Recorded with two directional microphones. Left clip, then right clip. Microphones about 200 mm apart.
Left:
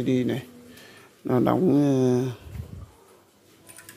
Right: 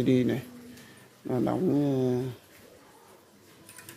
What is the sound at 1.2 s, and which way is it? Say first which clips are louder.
Speech: left 6 dB; 25° left (ahead or behind).